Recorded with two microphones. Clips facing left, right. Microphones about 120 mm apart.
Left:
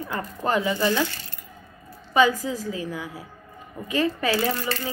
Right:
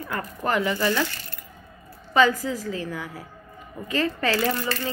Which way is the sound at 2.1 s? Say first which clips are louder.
Even; 15° left (ahead or behind).